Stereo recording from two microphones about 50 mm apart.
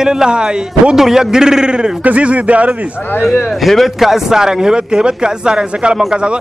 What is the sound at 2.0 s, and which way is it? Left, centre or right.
Speech, right.